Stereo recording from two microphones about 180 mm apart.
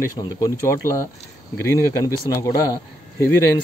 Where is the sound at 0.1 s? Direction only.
20° left (ahead or behind).